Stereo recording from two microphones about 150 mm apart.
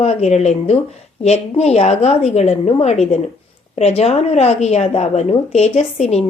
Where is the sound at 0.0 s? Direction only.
45° left (ahead or behind).